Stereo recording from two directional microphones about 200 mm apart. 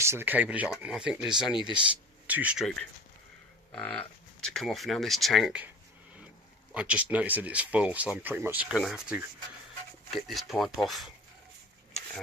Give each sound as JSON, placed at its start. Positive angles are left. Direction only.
{"t": 0.0, "sound": "speech", "side_deg": -10}
{"t": 6.7, "sound": "speech", "side_deg": -5}